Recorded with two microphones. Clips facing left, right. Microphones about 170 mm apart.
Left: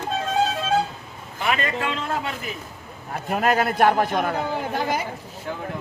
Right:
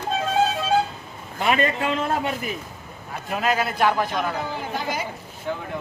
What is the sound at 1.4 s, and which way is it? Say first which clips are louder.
Speech: right 3 dB; 20° right (ahead or behind).